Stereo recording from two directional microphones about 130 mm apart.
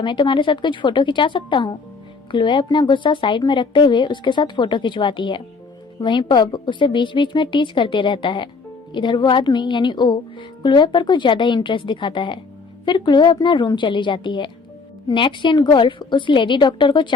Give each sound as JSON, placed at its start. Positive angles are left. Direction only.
{"t": 0.0, "sound": "speech", "side_deg": 35}